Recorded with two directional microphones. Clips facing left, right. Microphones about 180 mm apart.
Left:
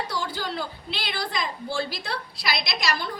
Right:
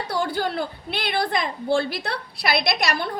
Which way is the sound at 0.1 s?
55° right (ahead or behind).